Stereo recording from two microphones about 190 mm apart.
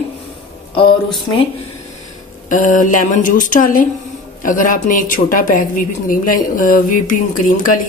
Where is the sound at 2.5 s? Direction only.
45° left (ahead or behind).